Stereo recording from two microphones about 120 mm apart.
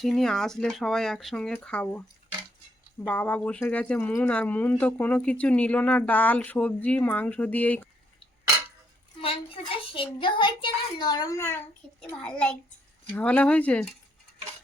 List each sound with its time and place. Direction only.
0.0 s speech: 5° left (ahead or behind)
9.2 s a woman's voice: 50° left (ahead or behind)
11.3 s a child's voice: 25° left (ahead or behind)
11.9 s speech: 5° left (ahead or behind)